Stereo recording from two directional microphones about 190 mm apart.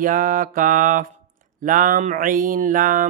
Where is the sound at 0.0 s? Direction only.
45° right (ahead or behind).